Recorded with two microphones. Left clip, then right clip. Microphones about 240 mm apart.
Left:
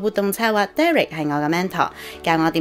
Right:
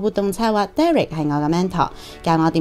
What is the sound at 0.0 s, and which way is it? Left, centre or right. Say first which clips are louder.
Speech: even; right.